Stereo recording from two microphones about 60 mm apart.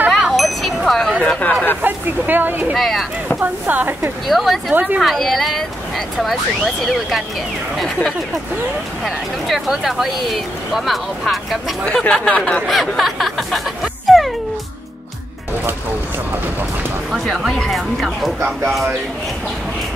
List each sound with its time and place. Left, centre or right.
0.3 s wind chime: centre
1.2 s a sound: centre
1.8 s speech: right
2.7 s speech: centre
3.3 s speech: right
4.3 s speech: centre
11.8 s speech: centre
12.6 s speech: centre
14.0 s music: centre
17.1 s speech: centre
17.6 s speech: centre